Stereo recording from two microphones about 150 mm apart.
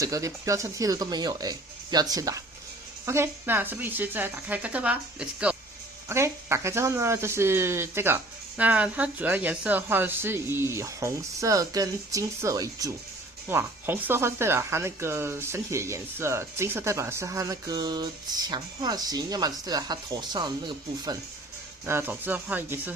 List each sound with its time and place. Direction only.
0.0 s speech: 20° right (ahead or behind)
6.1 s speech: 20° right (ahead or behind)
21.8 s speech: 15° right (ahead or behind)